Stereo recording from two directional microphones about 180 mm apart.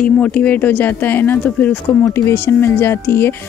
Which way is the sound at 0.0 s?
5° left (ahead or behind).